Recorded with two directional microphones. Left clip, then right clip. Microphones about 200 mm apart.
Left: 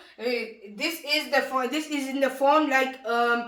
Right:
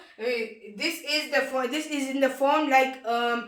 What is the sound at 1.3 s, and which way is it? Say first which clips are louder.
Speech: left 1 dB; 10° right (ahead or behind).